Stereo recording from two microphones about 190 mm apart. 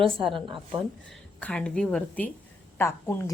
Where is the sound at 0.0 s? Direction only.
30° right (ahead or behind).